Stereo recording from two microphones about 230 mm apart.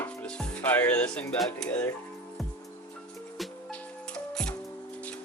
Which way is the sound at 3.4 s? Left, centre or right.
Centre.